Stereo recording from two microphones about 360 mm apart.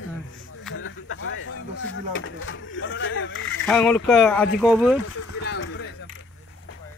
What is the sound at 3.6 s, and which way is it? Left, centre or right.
Speech, centre.